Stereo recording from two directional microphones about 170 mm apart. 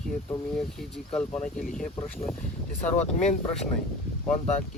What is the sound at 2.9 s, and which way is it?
Speech, 45° left (ahead or behind).